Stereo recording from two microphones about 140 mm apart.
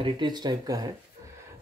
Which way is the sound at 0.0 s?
30° right (ahead or behind).